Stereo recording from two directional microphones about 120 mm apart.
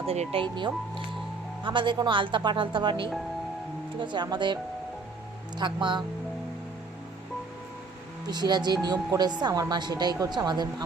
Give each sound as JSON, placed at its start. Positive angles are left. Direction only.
{"t": 0.0, "sound": "speech", "side_deg": -55}
{"t": 0.4, "sound": "speech", "side_deg": -40}
{"t": 5.5, "sound": "speech", "side_deg": -40}
{"t": 8.3, "sound": "speech", "side_deg": -35}